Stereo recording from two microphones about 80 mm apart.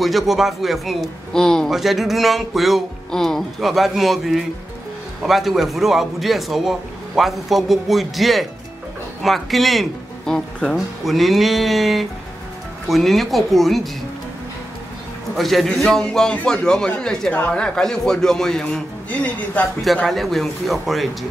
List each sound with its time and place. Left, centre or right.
0.0 s a man's voice: centre
15.3 s a man's voice: centre
19.0 s a woman's voice: centre
19.8 s a man's voice: centre